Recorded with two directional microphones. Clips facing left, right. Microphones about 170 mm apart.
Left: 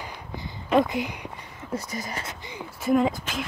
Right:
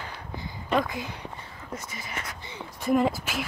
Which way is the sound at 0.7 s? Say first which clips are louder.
Left 5 dB; 20° left (ahead or behind).